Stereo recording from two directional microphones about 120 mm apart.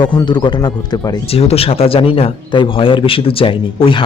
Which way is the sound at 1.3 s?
55° left (ahead or behind).